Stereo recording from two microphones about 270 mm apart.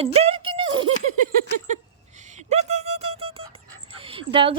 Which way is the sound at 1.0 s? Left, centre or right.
Right.